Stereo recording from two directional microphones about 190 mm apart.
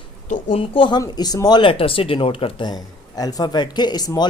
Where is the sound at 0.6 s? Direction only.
30° left (ahead or behind).